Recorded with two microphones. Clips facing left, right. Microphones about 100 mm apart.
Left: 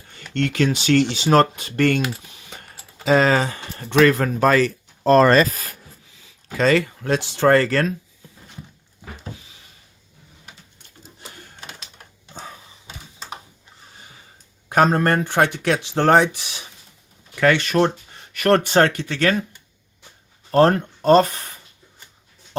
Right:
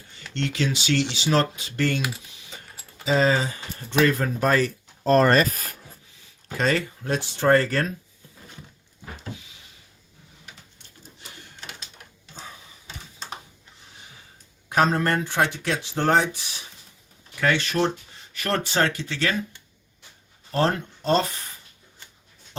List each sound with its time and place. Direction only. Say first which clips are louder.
0.3 s speech: left 6 dB; 55° left (ahead or behind)
3.0 s speech: left 4 dB; 70° left (ahead or behind); by 5.4 s 90° left
6.7 s speech: left 6 dB; 90° left
14.7 s speech: left 4 dB; 55° left (ahead or behind); by 16.6 s 75° left (ahead or behind)
17.4 s speech: left 5 dB; 65° left (ahead or behind)
20.5 s speech: left 8 dB; 50° left (ahead or behind)